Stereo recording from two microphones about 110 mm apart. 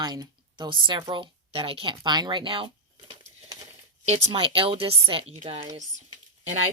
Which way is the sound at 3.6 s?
75° right (ahead or behind).